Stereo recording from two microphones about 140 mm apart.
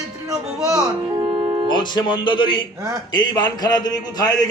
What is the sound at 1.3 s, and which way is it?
Music, 35° right (ahead or behind).